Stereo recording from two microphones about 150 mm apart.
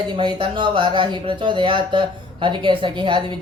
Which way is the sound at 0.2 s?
30° right (ahead or behind).